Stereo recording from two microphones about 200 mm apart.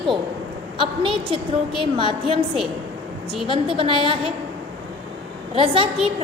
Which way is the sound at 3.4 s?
25° right (ahead or behind).